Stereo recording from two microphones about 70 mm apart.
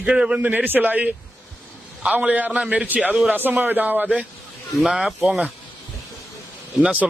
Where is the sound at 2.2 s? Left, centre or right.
Right.